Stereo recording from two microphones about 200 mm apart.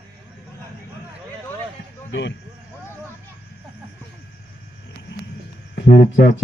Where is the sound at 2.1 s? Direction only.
60° left (ahead or behind).